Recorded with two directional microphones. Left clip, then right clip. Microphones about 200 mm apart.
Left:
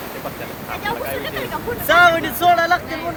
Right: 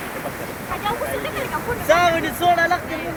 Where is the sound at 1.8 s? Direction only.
40° left (ahead or behind).